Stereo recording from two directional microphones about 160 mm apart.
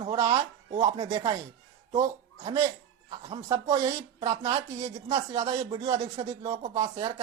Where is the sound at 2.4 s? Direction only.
30° right (ahead or behind).